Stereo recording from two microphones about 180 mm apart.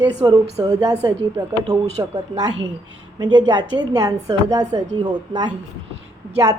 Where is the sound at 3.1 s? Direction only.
25° right (ahead or behind).